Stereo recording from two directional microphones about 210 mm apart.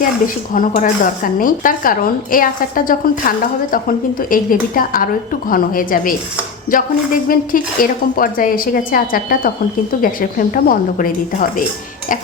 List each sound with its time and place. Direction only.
0.5 s speech: 40° left (ahead or behind)